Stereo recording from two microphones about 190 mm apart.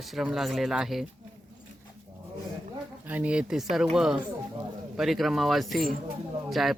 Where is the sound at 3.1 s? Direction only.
5° right (ahead or behind).